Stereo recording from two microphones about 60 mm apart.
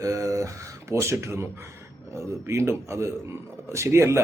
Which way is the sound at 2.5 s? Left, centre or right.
Right.